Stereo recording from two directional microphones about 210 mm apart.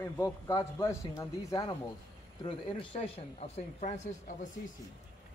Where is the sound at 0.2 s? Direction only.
15° left (ahead or behind); by 4.5 s 35° left (ahead or behind).